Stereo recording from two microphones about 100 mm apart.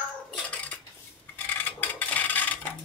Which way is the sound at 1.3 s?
20° left (ahead or behind).